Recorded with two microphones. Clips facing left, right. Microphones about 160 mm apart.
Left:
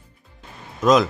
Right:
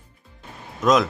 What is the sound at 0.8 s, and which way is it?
Speech, centre (ahead or behind).